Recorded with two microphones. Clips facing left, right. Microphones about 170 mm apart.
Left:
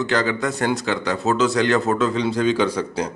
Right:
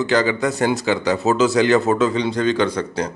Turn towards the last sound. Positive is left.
turn(degrees=5)  # may be behind; listen again after turning